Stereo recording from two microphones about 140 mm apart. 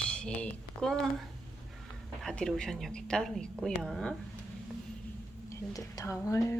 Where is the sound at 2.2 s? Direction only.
5° left (ahead or behind).